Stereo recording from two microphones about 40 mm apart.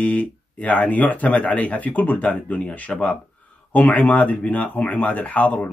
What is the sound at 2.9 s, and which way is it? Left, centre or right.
Speech, left.